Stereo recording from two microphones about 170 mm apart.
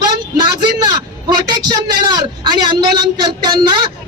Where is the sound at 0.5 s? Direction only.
25° right (ahead or behind).